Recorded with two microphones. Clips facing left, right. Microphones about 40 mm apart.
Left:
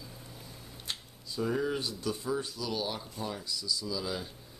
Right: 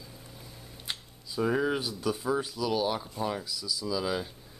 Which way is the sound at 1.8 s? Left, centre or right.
Centre.